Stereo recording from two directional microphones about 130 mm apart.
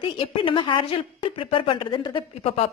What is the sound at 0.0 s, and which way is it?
A woman's voice, 45° left (ahead or behind).